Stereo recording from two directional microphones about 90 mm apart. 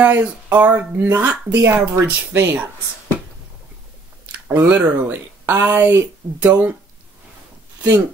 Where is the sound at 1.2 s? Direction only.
30° right (ahead or behind).